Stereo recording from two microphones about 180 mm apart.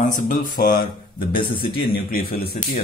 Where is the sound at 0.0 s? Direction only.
50° left (ahead or behind).